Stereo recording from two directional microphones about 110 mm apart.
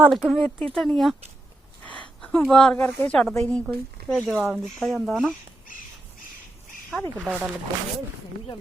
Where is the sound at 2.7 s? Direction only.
15° left (ahead or behind).